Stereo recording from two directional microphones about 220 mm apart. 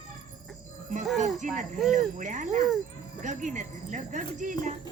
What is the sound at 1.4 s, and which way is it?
Speech, 35° right (ahead or behind).